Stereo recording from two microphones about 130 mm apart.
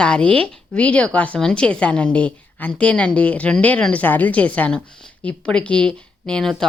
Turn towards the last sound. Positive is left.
turn(degrees=5)  # may be behind; listen again after turning